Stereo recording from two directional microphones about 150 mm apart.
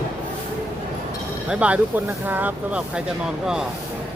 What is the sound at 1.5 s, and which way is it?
Speech, 10° right (ahead or behind).